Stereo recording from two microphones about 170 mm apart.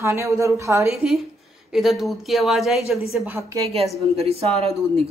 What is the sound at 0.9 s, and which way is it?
Speech, centre (ahead or behind).